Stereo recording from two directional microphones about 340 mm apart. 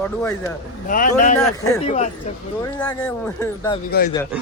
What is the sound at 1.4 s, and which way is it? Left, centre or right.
Speech, centre.